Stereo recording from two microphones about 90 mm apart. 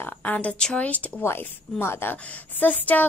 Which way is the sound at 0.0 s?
20° left (ahead or behind).